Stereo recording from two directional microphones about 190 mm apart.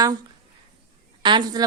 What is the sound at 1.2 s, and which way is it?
Speech, 25° right (ahead or behind).